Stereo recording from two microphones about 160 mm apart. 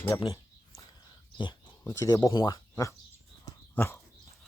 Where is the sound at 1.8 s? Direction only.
15° left (ahead or behind).